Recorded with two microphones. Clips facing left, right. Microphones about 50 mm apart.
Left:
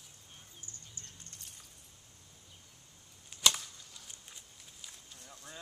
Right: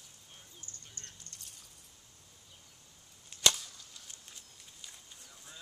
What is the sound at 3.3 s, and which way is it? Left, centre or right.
Chop, centre.